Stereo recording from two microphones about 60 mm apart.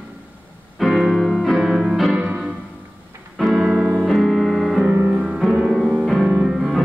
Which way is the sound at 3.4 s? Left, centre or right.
Centre.